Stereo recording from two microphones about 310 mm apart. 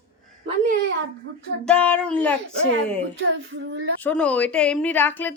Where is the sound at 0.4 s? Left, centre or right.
Right.